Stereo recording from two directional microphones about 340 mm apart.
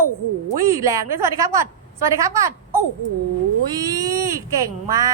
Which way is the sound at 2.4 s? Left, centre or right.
Centre.